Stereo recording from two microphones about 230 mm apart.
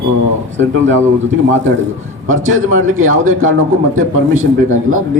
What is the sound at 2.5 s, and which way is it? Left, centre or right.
A man's voice, right.